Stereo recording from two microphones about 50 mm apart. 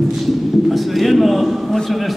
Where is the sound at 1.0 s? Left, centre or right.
Centre.